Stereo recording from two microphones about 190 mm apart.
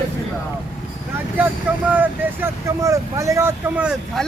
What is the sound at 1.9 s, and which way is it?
Speech, 10° right (ahead or behind).